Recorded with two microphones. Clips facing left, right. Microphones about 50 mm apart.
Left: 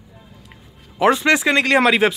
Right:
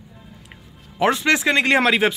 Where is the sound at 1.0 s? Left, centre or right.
Centre.